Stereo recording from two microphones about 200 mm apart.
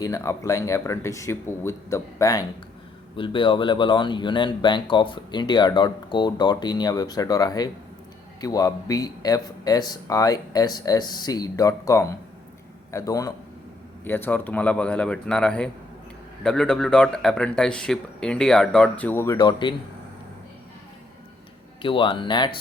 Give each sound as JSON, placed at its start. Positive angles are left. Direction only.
{"t": 0.0, "sound": "speech", "side_deg": 15}
{"t": 21.8, "sound": "speech", "side_deg": 25}